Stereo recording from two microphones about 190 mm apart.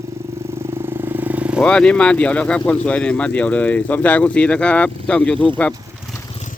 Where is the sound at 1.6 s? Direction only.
5° left (ahead or behind).